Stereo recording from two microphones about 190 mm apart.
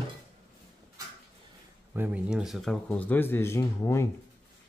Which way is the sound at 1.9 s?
10° right (ahead or behind).